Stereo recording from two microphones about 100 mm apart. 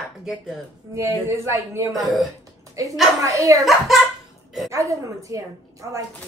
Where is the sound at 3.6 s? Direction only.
Centre (ahead or behind).